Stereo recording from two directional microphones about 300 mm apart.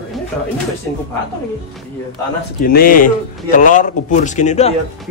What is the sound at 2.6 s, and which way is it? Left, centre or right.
A man's voice, left.